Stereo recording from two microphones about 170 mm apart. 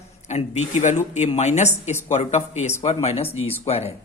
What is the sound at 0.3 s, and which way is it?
Speech, 40° left (ahead or behind).